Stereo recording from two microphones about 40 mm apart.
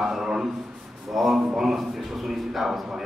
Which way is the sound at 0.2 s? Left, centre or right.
Centre.